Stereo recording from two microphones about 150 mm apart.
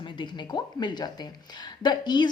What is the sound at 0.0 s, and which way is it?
Speech, 30° left (ahead or behind).